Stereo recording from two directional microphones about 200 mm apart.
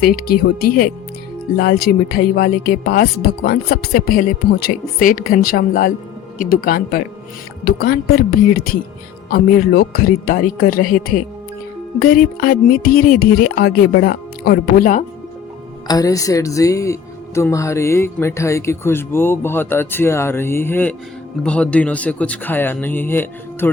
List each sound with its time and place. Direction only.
0.0 s speech: 45° left (ahead or behind)
15.9 s speech: 15° left (ahead or behind)